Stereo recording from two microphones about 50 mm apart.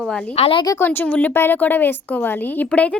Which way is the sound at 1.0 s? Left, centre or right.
Left.